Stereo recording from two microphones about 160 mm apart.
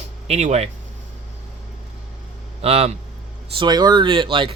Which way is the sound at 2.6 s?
40° right (ahead or behind).